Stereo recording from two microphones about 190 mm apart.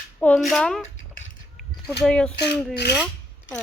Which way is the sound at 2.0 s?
5° left (ahead or behind).